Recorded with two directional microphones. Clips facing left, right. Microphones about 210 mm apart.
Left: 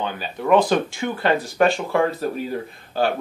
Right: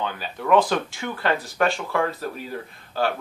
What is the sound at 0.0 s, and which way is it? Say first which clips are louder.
Speech: left 3 dB; 20° left (ahead or behind).